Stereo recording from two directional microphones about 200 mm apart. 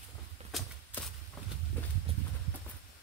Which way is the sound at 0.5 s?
Centre (ahead or behind).